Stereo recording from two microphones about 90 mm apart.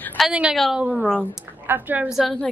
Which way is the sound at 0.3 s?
10° right (ahead or behind).